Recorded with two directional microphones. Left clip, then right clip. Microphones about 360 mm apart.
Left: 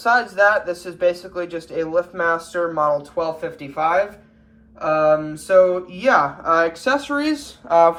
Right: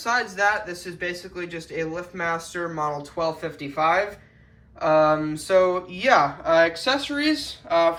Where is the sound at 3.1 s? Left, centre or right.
Centre.